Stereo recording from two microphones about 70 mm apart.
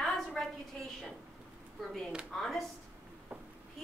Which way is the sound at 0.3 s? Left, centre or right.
Centre.